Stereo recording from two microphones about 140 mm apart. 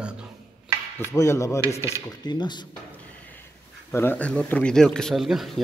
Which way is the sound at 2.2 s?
30° left (ahead or behind).